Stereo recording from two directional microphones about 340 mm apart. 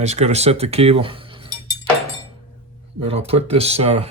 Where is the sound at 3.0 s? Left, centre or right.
Centre.